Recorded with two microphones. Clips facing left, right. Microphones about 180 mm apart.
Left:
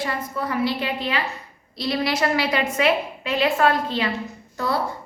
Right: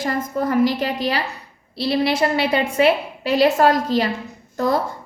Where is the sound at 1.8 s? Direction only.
30° right (ahead or behind).